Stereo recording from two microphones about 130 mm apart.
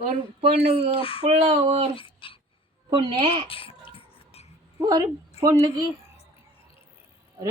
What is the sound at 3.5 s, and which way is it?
Music, 45° left (ahead or behind).